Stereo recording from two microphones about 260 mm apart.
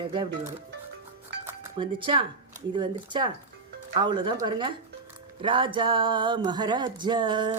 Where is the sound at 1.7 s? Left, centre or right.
Centre.